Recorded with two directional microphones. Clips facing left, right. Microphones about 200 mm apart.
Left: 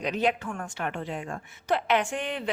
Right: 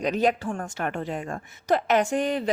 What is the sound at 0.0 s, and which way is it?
A woman's voice, 40° right (ahead or behind).